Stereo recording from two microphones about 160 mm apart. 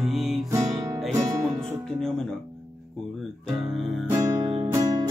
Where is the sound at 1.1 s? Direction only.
20° right (ahead or behind).